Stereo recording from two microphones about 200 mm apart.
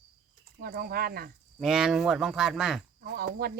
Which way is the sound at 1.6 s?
Centre (ahead or behind).